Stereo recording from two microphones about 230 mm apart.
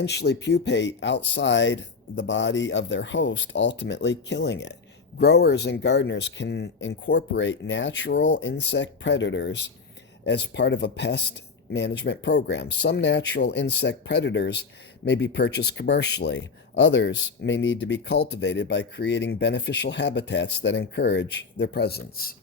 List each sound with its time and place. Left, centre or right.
0.0 s speech: left